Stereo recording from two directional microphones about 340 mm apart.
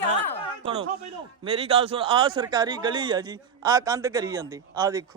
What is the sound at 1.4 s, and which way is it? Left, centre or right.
A man's voice, centre.